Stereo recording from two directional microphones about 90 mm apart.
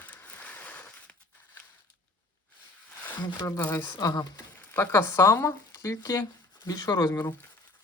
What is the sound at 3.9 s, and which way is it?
Speech, 40° left (ahead or behind).